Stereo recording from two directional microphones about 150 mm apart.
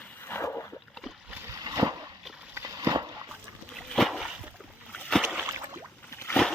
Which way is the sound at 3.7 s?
Centre (ahead or behind).